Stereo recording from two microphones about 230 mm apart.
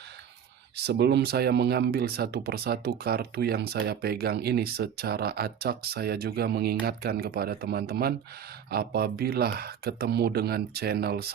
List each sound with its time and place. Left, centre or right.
0.8 s speech: right